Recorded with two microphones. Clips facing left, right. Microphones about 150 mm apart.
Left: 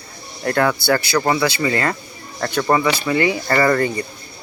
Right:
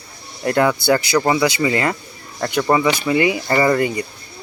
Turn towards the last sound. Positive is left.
turn(degrees=-15)  # may be behind; listen again after turning